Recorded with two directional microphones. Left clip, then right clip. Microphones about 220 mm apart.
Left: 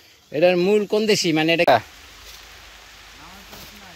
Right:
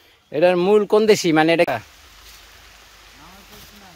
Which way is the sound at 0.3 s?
5° right (ahead or behind).